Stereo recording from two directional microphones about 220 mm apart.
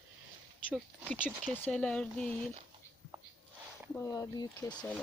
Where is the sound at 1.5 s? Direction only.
5° left (ahead or behind).